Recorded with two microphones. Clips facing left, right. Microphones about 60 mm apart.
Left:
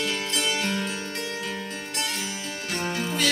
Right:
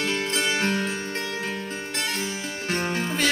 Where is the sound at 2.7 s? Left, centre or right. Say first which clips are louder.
Right 2 dB; right.